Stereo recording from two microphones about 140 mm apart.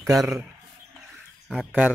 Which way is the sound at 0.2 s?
Centre (ahead or behind).